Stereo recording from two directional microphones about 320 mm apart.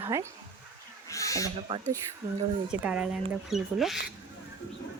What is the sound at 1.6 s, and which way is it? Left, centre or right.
Speech, centre.